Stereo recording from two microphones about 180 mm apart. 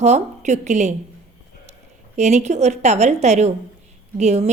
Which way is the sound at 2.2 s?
40° right (ahead or behind).